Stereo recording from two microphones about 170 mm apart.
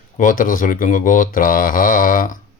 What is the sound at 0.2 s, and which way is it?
Speech, 50° left (ahead or behind).